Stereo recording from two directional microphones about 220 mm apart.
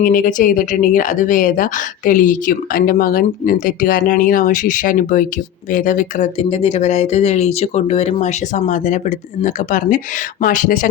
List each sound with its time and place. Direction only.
0.0 s speech: 40° left (ahead or behind)